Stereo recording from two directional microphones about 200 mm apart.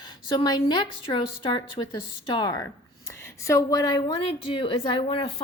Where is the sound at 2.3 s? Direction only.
20° left (ahead or behind).